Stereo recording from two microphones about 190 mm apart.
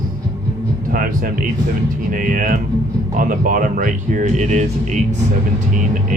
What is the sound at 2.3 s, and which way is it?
Speech, 45° right (ahead or behind).